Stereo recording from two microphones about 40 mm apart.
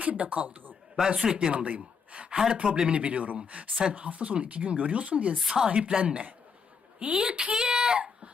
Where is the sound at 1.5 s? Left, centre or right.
Right.